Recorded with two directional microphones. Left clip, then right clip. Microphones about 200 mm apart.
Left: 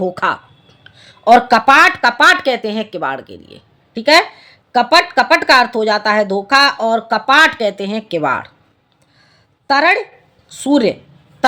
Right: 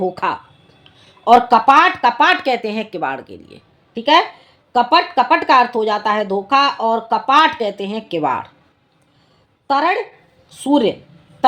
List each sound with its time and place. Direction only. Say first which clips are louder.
0.0 s speech: left 3 dB; 20° left (ahead or behind)
9.6 s speech: left 4 dB; 30° left (ahead or behind)